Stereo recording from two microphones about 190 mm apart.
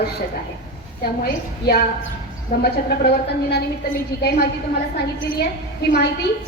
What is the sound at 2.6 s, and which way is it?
A woman's voice, 55° left (ahead or behind).